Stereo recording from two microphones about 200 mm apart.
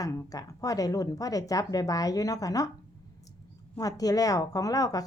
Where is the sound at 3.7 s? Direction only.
20° left (ahead or behind).